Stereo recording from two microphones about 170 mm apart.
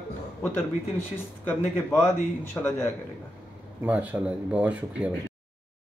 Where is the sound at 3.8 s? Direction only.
10° right (ahead or behind).